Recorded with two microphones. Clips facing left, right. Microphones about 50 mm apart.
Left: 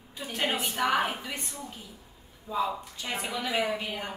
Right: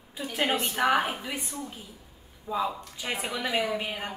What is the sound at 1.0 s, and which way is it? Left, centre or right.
Speech, centre.